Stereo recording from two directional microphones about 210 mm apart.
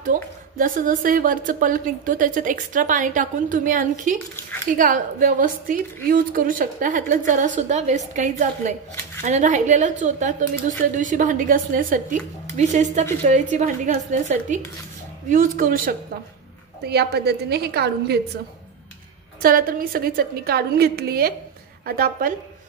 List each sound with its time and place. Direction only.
0.0 s a woman's voice: 40° right (ahead or behind)
19.4 s a woman's voice: 45° right (ahead or behind)